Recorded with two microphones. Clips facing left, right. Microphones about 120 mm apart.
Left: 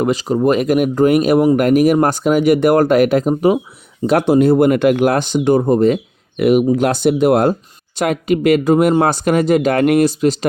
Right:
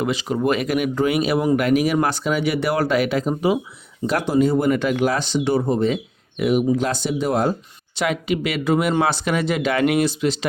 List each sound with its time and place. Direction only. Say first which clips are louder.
0.0 s speech: left 6 dB; 40° left (ahead or behind)
4.0 s speech: left 7 dB; 60° left (ahead or behind)
6.3 s speech: left 6 dB; 65° left (ahead or behind)
7.9 s speech: left 6 dB; 45° left (ahead or behind)